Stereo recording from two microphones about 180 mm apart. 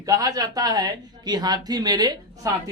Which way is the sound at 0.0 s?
20° right (ahead or behind).